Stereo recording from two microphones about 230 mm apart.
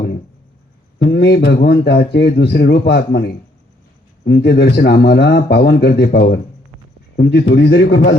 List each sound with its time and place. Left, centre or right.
0.9 s a man's voice: left
4.3 s a man's voice: left